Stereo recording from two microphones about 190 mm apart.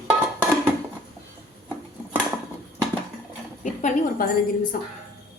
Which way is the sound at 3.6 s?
40° left (ahead or behind).